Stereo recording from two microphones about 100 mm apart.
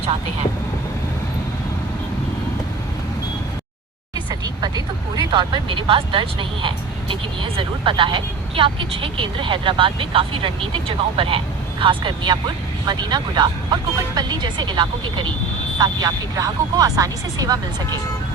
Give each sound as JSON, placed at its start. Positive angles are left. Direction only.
{"t": 4.1, "sound": "a woman's voice", "side_deg": -40}